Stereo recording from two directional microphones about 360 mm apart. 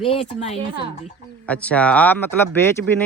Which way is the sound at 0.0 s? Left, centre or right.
Centre.